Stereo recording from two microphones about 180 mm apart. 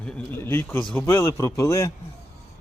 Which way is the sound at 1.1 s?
20° left (ahead or behind).